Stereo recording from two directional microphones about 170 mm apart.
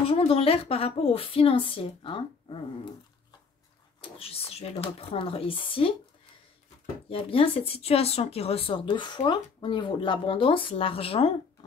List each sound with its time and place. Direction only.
0.0 s speech: 35° left (ahead or behind)
4.0 s speech: 35° left (ahead or behind)
7.1 s speech: 35° left (ahead or behind)